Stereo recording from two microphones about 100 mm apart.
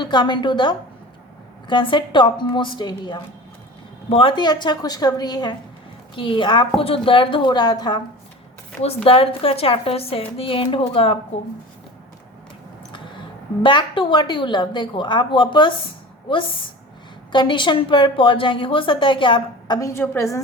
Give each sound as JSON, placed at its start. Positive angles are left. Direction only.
{"t": 0.0, "sound": "a woman's voice", "side_deg": 50}
{"t": 4.1, "sound": "a woman's voice", "side_deg": 60}
{"t": 6.1, "sound": "a woman's voice", "side_deg": 55}
{"t": 6.7, "sound": "a woman's voice", "side_deg": 70}
{"t": 9.0, "sound": "a woman's voice", "side_deg": 70}
{"t": 13.6, "sound": "a woman's voice", "side_deg": 55}
{"t": 19.9, "sound": "a woman's voice", "side_deg": 30}